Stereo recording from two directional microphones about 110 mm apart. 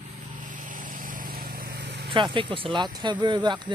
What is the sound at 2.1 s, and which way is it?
Speech, 50° right (ahead or behind).